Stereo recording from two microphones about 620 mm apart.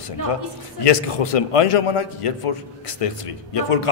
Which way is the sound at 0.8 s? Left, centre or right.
Left.